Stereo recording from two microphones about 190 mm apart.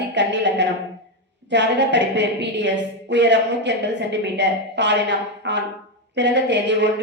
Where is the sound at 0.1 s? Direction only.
70° right (ahead or behind).